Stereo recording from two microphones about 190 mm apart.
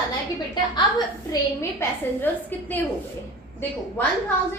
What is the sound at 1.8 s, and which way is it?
A woman's voice, 10° left (ahead or behind).